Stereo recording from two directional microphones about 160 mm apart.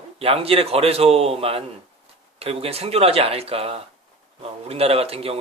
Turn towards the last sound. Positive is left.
turn(degrees=-35)  # may be behind; listen again after turning